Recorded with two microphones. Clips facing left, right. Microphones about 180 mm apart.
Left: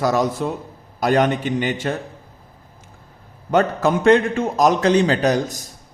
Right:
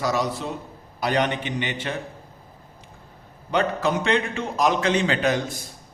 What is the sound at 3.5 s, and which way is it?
A man's voice, 45° left (ahead or behind).